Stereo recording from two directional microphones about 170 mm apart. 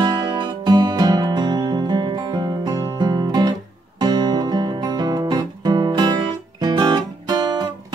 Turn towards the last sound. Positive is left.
turn(degrees=-25)  # may be behind; listen again after turning